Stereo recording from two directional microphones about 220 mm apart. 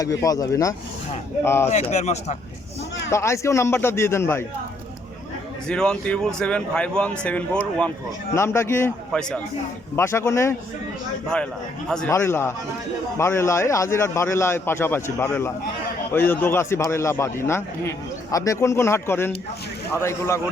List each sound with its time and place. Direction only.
0.0 s a man's voice: 15° left (ahead or behind)
1.7 s speech: 30° left (ahead or behind)
3.1 s a man's voice: 10° left (ahead or behind)
5.6 s a man's voice: 5° left (ahead or behind)